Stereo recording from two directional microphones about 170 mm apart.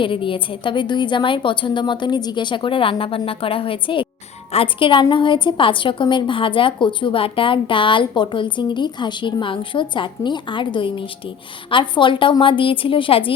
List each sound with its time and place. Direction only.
0.0 s a woman's voice: 30° left (ahead or behind)